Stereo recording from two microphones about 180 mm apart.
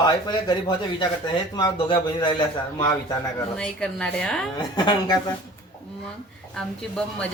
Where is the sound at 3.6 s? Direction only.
5° left (ahead or behind).